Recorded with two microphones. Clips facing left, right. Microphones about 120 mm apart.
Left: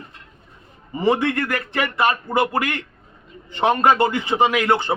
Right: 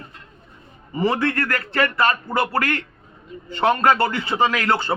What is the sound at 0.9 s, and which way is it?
A man's voice, 15° left (ahead or behind).